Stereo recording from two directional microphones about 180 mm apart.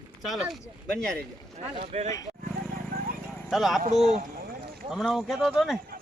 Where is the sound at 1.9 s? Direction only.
35° right (ahead or behind).